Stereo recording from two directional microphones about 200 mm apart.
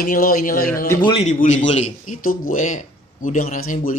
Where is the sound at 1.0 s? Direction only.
25° left (ahead or behind).